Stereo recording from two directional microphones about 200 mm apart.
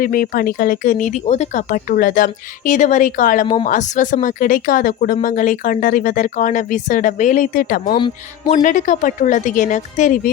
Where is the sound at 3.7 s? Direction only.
40° left (ahead or behind).